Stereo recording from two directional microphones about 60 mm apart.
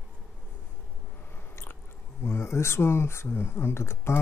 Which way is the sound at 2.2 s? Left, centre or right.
Left.